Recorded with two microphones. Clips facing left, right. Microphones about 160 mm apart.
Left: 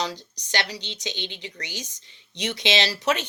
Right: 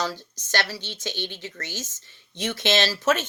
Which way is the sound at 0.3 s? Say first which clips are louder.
Right 1 dB; 15° left (ahead or behind).